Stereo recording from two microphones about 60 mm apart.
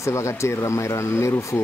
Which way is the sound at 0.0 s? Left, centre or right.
Left.